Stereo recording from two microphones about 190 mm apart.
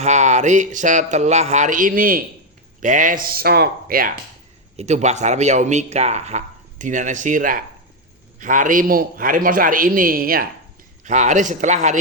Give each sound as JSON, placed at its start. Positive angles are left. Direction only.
{"t": 0.0, "sound": "a man's voice", "side_deg": -40}
{"t": 4.8, "sound": "a man's voice", "side_deg": -35}
{"t": 11.0, "sound": "speech", "side_deg": -40}